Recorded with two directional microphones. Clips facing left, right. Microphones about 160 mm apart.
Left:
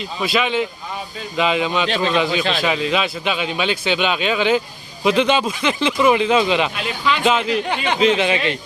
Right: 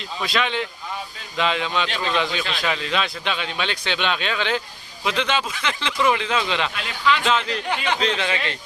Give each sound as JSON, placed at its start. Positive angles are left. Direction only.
{"t": 0.0, "sound": "speech", "side_deg": 5}
{"t": 1.9, "sound": "a man's voice", "side_deg": 25}
{"t": 2.1, "sound": "speech", "side_deg": 5}